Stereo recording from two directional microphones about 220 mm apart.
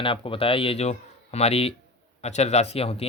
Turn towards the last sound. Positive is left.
turn(degrees=25)  # may be behind; listen again after turning